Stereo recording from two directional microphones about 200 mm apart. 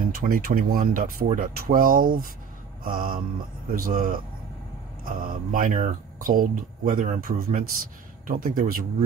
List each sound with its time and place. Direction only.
0.1 s speech: 45° right (ahead or behind)